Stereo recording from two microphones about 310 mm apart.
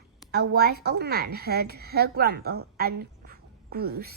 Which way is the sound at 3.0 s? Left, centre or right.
Right.